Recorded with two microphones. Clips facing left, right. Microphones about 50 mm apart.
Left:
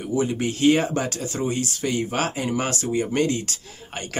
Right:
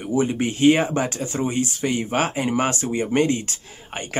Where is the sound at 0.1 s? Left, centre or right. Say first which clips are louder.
Right 2 dB; right.